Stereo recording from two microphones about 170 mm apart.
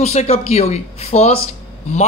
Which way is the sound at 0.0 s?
40° left (ahead or behind).